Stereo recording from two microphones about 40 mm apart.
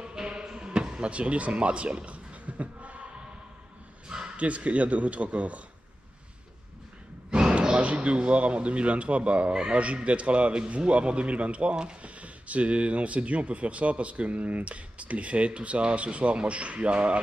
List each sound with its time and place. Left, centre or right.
0.0 s basketball bounce: centre; by 3.1 s right
4.4 s speech: right
7.2 s speech: right